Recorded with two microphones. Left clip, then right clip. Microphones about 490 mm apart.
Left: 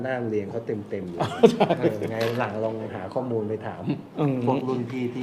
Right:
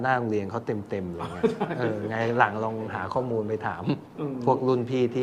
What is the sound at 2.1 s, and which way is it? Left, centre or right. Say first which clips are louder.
A man's voice: right 3 dB; right.